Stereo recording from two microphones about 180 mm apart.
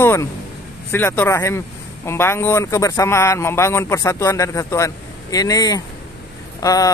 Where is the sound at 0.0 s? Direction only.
15° left (ahead or behind).